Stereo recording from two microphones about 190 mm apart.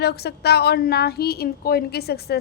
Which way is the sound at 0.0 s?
60° left (ahead or behind).